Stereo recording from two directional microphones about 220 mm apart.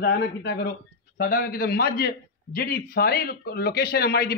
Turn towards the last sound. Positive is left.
turn(degrees=45)  # may be behind; listen again after turning